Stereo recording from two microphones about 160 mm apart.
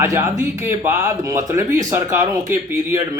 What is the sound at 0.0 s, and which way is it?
Speech, 15° right (ahead or behind).